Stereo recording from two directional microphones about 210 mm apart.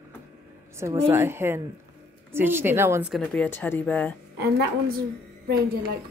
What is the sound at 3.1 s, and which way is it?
Speech, 5° left (ahead or behind).